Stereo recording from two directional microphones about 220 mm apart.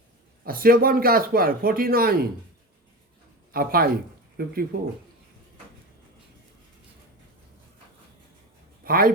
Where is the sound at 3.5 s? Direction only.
45° right (ahead or behind).